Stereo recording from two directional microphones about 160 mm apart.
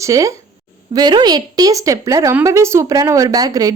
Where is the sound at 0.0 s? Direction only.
20° right (ahead or behind).